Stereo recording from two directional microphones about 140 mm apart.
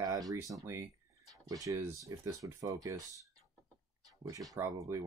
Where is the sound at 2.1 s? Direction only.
20° right (ahead or behind).